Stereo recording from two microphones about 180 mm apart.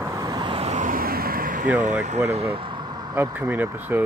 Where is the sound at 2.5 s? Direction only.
30° right (ahead or behind).